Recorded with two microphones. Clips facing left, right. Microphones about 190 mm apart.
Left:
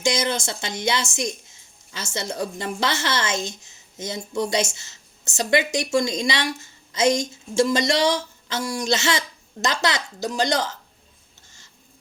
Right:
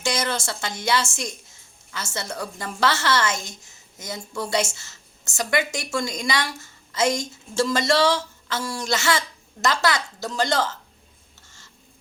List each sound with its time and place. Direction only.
0.0 s a woman's voice: 15° left (ahead or behind)